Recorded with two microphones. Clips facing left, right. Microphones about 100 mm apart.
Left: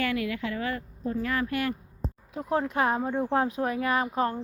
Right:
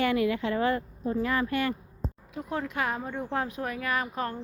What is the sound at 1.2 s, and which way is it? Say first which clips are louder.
Speech: right 1 dB; centre (ahead or behind).